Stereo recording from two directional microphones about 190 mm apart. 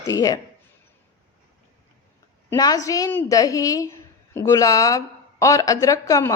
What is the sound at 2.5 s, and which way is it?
A woman's voice, 20° left (ahead or behind).